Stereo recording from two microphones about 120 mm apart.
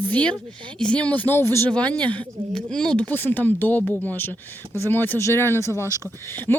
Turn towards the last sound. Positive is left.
turn(degrees=15)  # may be behind; listen again after turning